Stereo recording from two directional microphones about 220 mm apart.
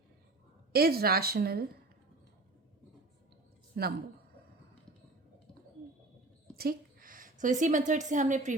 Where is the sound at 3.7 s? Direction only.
45° right (ahead or behind).